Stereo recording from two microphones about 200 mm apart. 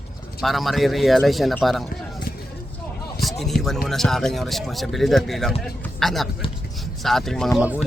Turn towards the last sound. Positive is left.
turn(degrees=-5)  # may be behind; listen again after turning